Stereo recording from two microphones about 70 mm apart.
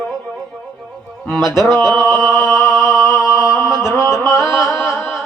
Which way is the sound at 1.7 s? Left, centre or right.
Left.